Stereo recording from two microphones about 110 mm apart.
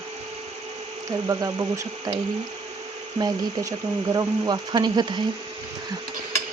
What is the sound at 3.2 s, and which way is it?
Speech, 30° right (ahead or behind).